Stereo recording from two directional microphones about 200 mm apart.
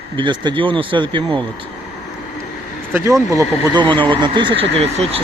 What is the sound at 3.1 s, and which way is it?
Speech, 15° right (ahead or behind).